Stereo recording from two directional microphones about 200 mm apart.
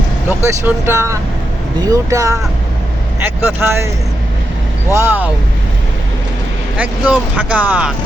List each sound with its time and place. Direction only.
0.3 s speech: 10° right (ahead or behind)
4.9 s speech: 10° right (ahead or behind)
6.7 s speech: 5° right (ahead or behind)